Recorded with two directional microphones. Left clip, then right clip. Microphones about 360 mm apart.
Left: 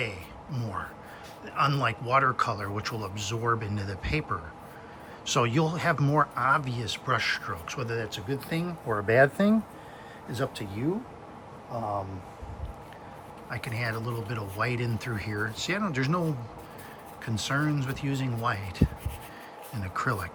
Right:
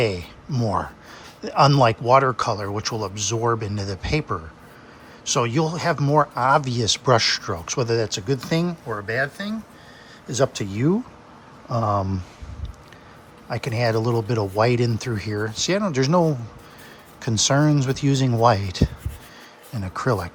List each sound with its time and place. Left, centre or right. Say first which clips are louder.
0.0 s speech: right 11 dB; centre
8.9 s speech: left 5 dB; centre
10.3 s speech: right 11 dB; centre
11.7 s speech: right 9 dB; right
13.5 s speech: right 10 dB; centre
17.2 s speech: right 10 dB; centre